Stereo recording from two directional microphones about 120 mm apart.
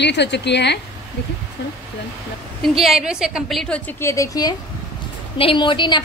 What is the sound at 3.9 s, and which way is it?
Speech, 25° left (ahead or behind).